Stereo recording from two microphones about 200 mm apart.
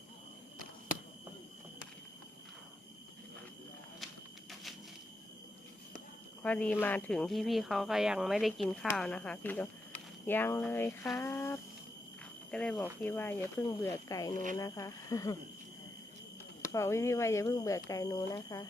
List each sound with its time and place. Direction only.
6.4 s speech: 5° left (ahead or behind)
16.6 s speech: 15° left (ahead or behind)